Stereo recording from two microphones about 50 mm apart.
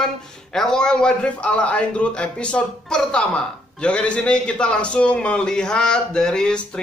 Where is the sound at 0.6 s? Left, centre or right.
Centre.